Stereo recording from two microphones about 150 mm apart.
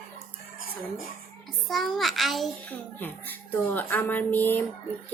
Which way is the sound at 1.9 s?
Centre (ahead or behind).